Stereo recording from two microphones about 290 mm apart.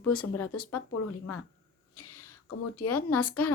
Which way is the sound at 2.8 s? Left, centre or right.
Left.